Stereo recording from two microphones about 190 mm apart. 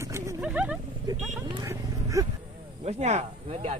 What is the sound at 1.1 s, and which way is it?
Speech, 20° right (ahead or behind).